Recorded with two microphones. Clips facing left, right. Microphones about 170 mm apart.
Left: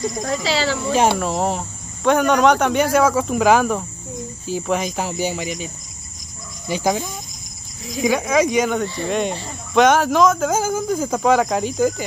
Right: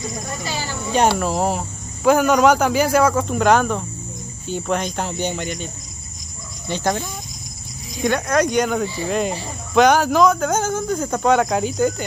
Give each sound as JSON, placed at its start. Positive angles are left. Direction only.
{"t": 0.2, "sound": "speech", "side_deg": 90}
{"t": 0.9, "sound": "speech", "side_deg": 0}
{"t": 6.7, "sound": "speech", "side_deg": 5}